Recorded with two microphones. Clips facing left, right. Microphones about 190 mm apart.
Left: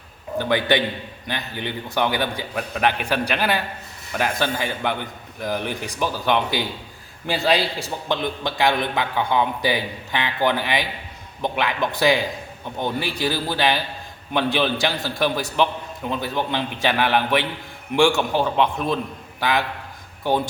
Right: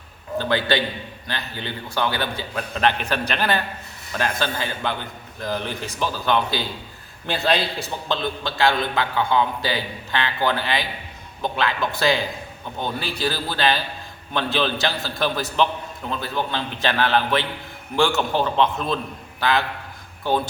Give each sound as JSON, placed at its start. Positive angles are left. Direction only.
{"t": 0.3, "sound": "a man's voice", "side_deg": 15}